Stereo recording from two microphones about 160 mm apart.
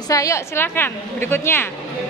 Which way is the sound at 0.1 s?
20° left (ahead or behind).